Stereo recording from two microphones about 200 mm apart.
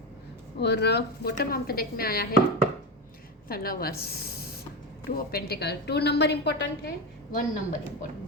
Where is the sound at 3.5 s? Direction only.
50° left (ahead or behind).